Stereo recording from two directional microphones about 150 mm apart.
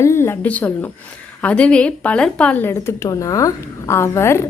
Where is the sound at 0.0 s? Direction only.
15° left (ahead or behind).